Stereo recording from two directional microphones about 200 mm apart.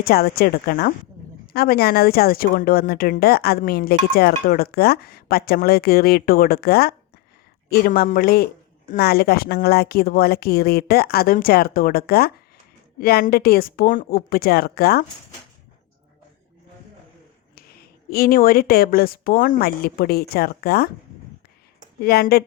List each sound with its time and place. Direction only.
0.0 s speech: 50° left (ahead or behind)
17.5 s speech: 50° left (ahead or behind)
22.0 s speech: 50° left (ahead or behind)